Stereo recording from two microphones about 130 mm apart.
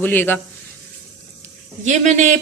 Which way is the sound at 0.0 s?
15° left (ahead or behind).